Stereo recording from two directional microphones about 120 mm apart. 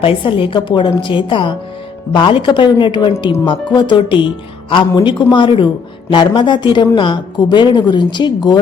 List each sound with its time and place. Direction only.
0.0 s a woman's voice: 50° left (ahead or behind)